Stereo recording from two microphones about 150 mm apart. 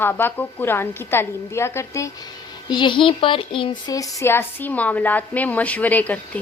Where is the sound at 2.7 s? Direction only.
30° left (ahead or behind).